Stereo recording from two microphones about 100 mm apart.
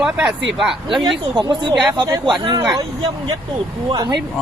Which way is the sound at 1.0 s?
45° right (ahead or behind).